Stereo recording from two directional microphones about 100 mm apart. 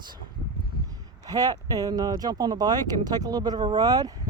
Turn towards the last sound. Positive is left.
turn(degrees=-40)  # may be behind; listen again after turning